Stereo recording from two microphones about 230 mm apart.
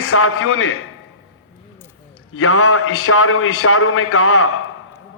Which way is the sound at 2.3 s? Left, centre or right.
Left.